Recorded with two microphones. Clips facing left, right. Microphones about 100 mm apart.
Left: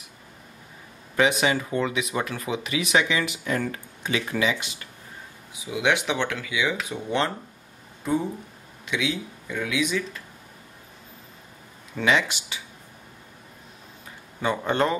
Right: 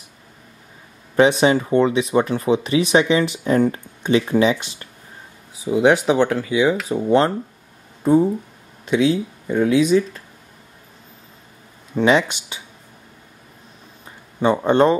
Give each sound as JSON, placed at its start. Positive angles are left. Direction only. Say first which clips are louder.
{"t": 1.1, "sound": "speech", "louder": "right 7 dB", "side_deg": -30}
{"t": 11.9, "sound": "speech", "louder": "right 7 dB", "side_deg": -30}
{"t": 14.4, "sound": "speech", "louder": "right 8 dB", "side_deg": -25}